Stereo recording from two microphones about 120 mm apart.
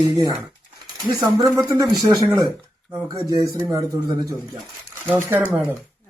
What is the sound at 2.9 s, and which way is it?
Speech, 30° right (ahead or behind).